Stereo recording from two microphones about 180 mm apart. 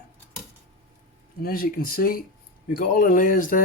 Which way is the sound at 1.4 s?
55° left (ahead or behind).